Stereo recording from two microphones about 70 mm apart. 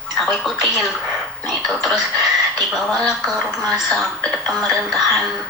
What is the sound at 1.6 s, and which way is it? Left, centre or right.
Speech, centre.